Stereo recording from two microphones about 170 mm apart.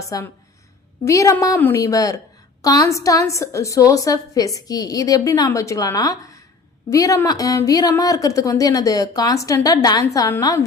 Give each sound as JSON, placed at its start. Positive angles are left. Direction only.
{"t": 0.1, "sound": "a woman's voice", "side_deg": 20}